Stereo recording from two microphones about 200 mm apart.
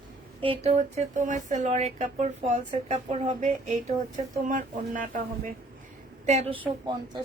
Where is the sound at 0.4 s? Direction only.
25° right (ahead or behind).